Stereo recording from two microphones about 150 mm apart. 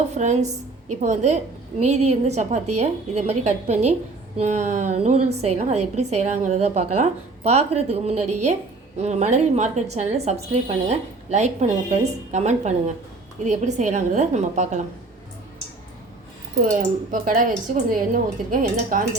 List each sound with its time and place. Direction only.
0.2 s a woman's voice: 50° right (ahead or behind)
16.6 s speech: 65° right (ahead or behind)